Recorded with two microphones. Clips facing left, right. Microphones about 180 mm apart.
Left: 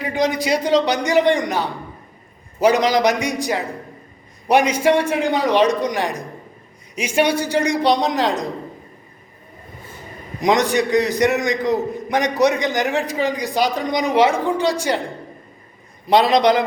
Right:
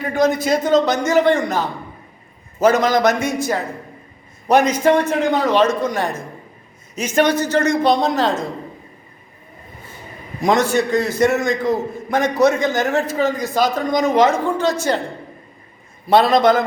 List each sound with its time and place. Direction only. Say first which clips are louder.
0.3 s a man's voice: right 1 dB; 15° left (ahead or behind)
10.4 s a man's voice: right 1 dB; 15° left (ahead or behind)
16.0 s a man's voice: right 1 dB; 15° left (ahead or behind)